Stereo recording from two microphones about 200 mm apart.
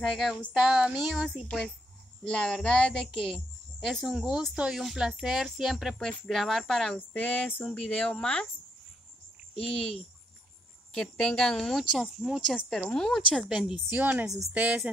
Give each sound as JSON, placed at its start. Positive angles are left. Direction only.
{"t": 0.2, "sound": "speech", "side_deg": 0}
{"t": 9.6, "sound": "speech", "side_deg": 0}
{"t": 11.0, "sound": "a woman's voice", "side_deg": 0}